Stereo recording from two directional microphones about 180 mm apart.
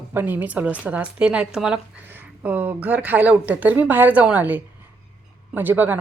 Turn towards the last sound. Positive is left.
turn(degrees=-10)  # may be behind; listen again after turning